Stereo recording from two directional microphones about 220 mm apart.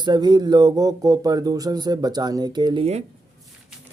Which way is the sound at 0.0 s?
20° right (ahead or behind).